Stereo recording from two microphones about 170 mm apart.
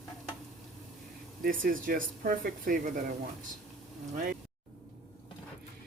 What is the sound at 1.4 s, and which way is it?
Speech, 55° right (ahead or behind).